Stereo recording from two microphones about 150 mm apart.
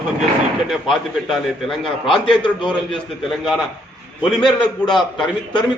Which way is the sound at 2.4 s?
35° left (ahead or behind).